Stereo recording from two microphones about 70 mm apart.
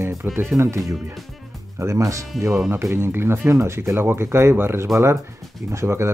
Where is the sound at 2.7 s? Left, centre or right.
Right.